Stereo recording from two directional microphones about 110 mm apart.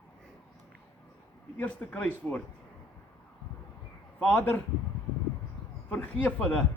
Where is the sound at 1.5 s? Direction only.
15° left (ahead or behind).